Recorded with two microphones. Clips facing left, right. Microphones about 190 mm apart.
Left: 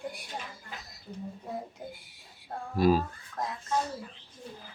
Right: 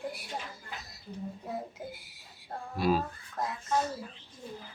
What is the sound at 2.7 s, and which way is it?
Speech, 45° left (ahead or behind).